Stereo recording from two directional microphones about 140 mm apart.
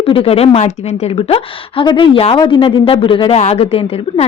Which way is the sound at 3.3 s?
50° left (ahead or behind).